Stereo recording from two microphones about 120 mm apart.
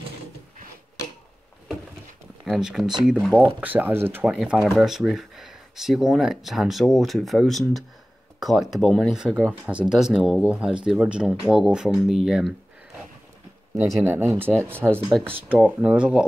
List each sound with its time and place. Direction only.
2.4 s speech: centre (ahead or behind)
3.6 s speech: 15° right (ahead or behind)
4.4 s speech: 5° right (ahead or behind)
13.7 s speech: 20° right (ahead or behind)